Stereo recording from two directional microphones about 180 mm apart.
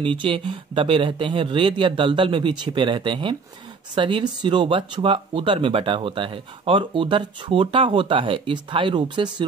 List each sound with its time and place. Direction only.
0.0 s speech: 30° right (ahead or behind)